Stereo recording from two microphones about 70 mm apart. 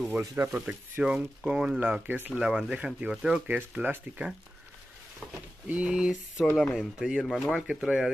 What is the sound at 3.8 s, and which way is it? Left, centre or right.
Speech, right.